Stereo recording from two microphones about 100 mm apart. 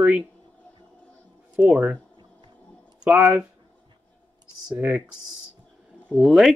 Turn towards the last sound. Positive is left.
turn(degrees=0)  # may be behind; listen again after turning